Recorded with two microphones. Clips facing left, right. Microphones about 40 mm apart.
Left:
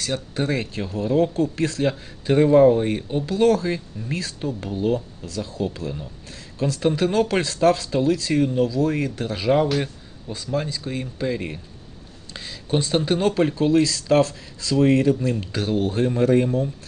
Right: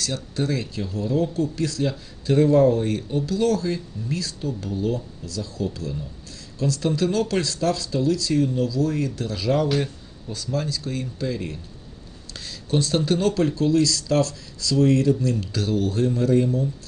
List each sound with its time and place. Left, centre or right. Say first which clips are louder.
0.0 s speech: left 1 dB; left